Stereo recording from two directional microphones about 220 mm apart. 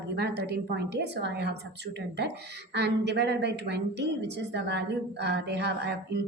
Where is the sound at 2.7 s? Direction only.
50° right (ahead or behind).